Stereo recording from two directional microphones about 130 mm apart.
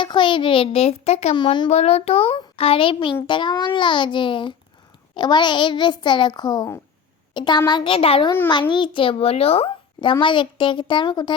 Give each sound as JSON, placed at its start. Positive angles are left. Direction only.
{"t": 0.0, "sound": "a child's voice", "side_deg": 40}
{"t": 1.4, "sound": "a child's voice", "side_deg": 35}
{"t": 1.7, "sound": "a child's voice", "side_deg": 55}